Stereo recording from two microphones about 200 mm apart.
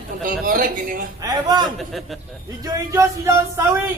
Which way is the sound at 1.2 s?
20° right (ahead or behind).